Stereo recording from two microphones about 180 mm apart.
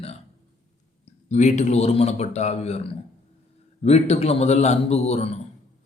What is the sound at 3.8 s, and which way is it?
Speech, 35° left (ahead or behind).